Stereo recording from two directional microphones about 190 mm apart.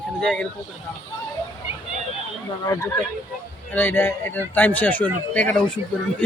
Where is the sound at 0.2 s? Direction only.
5° left (ahead or behind).